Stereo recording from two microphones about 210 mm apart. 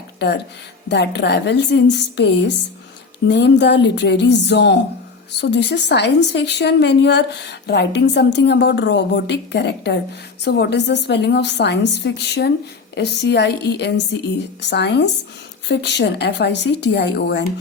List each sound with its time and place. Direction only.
0.2 s a woman's voice: 55° left (ahead or behind)